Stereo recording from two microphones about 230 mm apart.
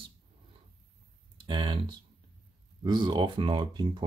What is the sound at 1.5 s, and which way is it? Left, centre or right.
Speech, centre.